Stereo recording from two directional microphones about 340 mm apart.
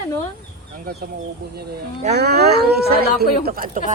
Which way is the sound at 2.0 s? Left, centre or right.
Right.